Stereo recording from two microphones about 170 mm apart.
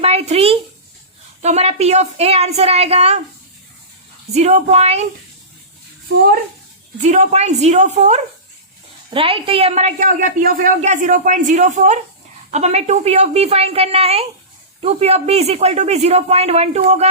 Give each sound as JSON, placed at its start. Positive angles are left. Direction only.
{"t": 0.0, "sound": "a man's voice", "side_deg": -35}
{"t": 4.4, "sound": "a man's voice", "side_deg": -40}
{"t": 6.1, "sound": "speech", "side_deg": -90}
{"t": 7.0, "sound": "a man's voice", "side_deg": -45}